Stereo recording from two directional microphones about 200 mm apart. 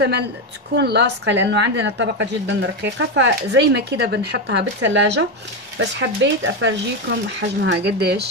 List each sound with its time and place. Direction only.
0.7 s a woman's voice: 60° right (ahead or behind)